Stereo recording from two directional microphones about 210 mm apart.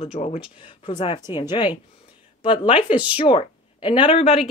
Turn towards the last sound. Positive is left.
turn(degrees=25)  # may be behind; listen again after turning